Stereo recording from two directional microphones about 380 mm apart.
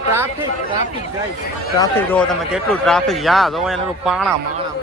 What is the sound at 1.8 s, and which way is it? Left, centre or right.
A man's voice, centre.